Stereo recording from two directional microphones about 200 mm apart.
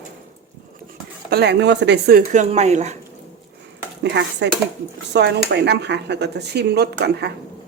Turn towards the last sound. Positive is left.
turn(degrees=-55)  # may be behind; listen again after turning